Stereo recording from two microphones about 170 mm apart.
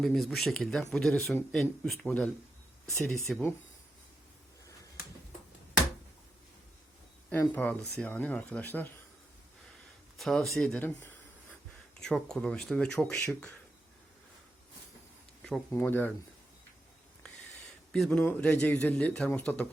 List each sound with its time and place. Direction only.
0.0 s speech: 5° left (ahead or behind)
7.3 s speech: 10° left (ahead or behind)
10.2 s speech: centre (ahead or behind)
15.4 s a sound: 5° left (ahead or behind)
15.7 s speech: 10° left (ahead or behind)
17.9 s speech: 5° left (ahead or behind)